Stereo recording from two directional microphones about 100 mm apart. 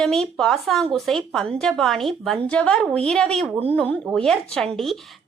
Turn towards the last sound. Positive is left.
turn(degrees=0)  # may be behind; listen again after turning